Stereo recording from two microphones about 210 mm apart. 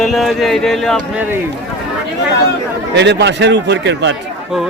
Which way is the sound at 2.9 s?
55° right (ahead or behind).